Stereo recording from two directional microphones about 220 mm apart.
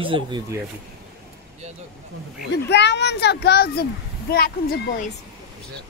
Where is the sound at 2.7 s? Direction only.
50° left (ahead or behind).